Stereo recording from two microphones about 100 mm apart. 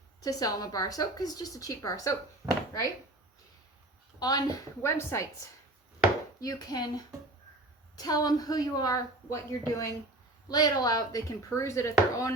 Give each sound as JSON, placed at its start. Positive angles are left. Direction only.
{"t": 0.2, "sound": "speech", "side_deg": 35}
{"t": 4.2, "sound": "speech", "side_deg": 40}
{"t": 4.8, "sound": "a woman's voice", "side_deg": 25}
{"t": 6.4, "sound": "speech", "side_deg": 40}